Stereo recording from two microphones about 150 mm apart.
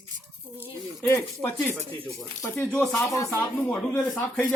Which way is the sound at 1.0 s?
20° left (ahead or behind).